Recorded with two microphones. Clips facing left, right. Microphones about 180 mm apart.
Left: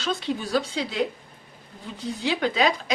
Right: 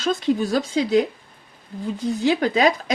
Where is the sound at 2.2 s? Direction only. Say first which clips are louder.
Right 4 dB; 40° right (ahead or behind).